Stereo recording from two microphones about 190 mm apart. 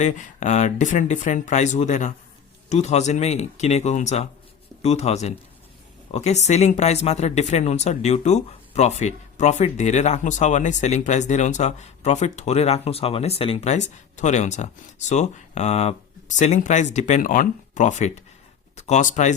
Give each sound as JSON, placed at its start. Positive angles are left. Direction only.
{"t": 0.0, "sound": "speech", "side_deg": 40}